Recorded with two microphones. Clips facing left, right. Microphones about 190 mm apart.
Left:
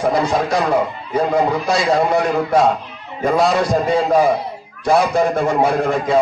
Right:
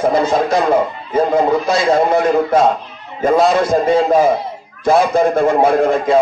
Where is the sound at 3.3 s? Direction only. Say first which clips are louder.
Right 3 dB; centre (ahead or behind).